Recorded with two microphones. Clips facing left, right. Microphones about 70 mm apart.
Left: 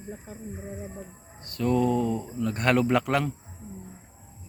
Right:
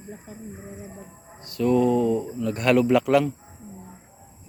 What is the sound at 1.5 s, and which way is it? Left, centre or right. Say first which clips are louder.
Speech: right 4 dB; left.